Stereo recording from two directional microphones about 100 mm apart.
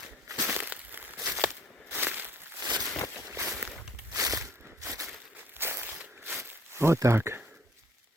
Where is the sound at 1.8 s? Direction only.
20° right (ahead or behind).